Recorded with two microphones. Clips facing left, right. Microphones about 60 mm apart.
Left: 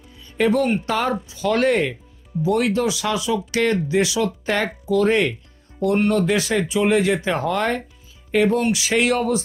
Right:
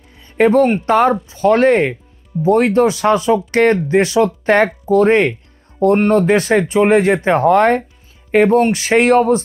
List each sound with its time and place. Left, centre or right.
0.2 s speech: right